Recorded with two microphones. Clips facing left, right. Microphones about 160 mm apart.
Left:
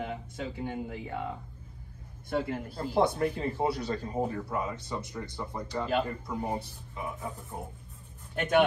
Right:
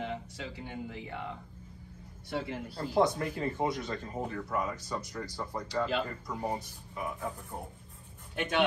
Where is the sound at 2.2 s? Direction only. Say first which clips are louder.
Left 5 dB; 50° left (ahead or behind).